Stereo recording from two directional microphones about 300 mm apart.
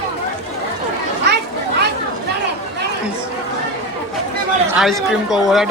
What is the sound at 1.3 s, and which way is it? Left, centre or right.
Children playing, right.